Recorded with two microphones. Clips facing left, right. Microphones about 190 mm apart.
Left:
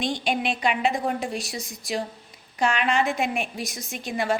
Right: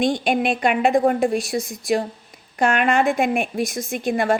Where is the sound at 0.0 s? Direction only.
50° right (ahead or behind).